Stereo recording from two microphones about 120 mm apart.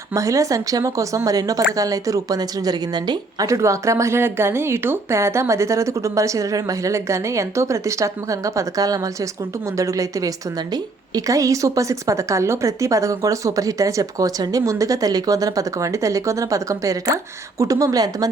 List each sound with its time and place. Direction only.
0.1 s a woman's voice: 25° right (ahead or behind)